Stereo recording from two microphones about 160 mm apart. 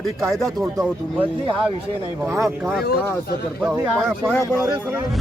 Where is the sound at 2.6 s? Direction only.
Centre (ahead or behind).